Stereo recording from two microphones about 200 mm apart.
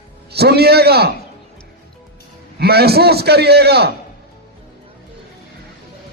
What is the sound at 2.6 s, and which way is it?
A man's voice, 50° right (ahead or behind).